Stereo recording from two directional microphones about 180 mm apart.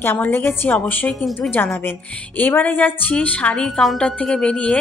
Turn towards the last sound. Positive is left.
turn(degrees=5)  # may be behind; listen again after turning